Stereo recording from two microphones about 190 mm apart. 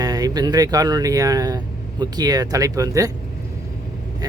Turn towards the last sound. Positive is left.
turn(degrees=-20)  # may be behind; listen again after turning